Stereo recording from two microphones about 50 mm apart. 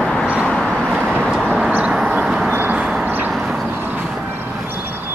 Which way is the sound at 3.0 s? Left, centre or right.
Right.